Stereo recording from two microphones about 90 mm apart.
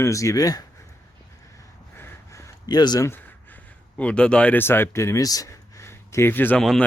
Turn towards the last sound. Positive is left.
turn(degrees=5)  # may be behind; listen again after turning